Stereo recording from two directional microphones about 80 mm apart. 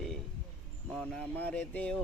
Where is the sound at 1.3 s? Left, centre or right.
Centre.